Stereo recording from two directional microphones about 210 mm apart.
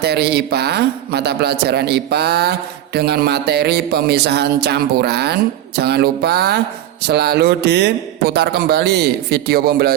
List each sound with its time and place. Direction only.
0.0 s a man's voice: 50° right (ahead or behind)